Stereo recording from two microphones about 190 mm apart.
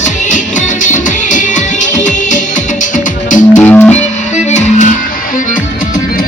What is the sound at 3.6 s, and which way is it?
Music, 10° left (ahead or behind).